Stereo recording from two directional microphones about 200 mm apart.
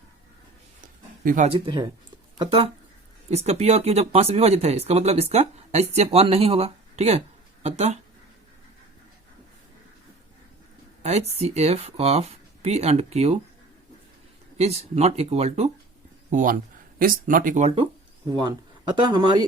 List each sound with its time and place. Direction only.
1.2 s speech: 45° right (ahead or behind)
1.5 s speech: 25° right (ahead or behind)
11.0 s speech: 30° right (ahead or behind)
14.6 s speech: 30° right (ahead or behind)
18.3 s speech: 20° right (ahead or behind)